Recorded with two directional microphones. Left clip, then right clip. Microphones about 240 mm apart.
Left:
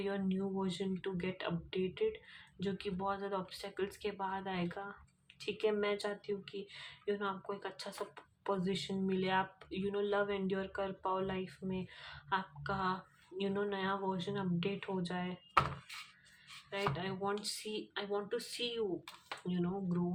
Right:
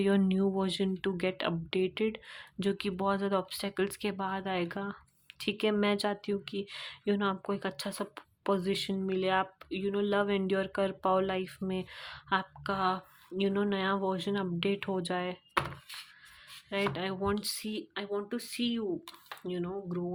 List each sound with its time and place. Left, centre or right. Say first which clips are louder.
0.0 s speech: right 9 dB; right
16.6 s speech: right 5 dB; right